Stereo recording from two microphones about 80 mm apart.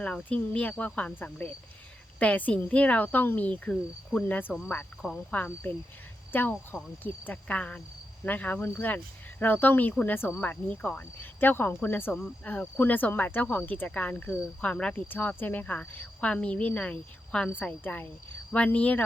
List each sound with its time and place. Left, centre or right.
0.0 s speech: centre